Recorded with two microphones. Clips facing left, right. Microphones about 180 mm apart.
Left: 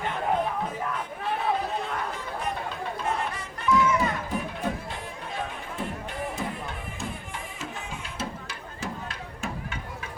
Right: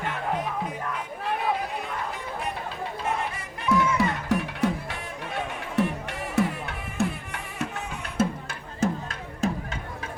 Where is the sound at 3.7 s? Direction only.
75° right (ahead or behind).